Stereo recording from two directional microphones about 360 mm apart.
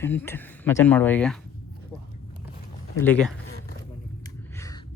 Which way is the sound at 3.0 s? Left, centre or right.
Centre.